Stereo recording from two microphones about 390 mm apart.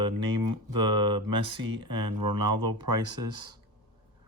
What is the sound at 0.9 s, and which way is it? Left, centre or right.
Speech, centre.